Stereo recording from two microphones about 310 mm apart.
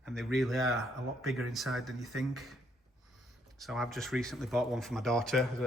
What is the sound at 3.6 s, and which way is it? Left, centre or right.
A man's voice, centre.